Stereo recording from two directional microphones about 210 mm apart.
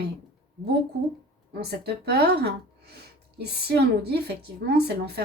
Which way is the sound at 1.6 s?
50° right (ahead or behind).